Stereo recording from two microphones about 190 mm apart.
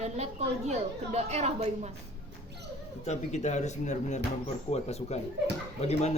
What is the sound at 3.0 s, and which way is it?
Speech, 35° left (ahead or behind).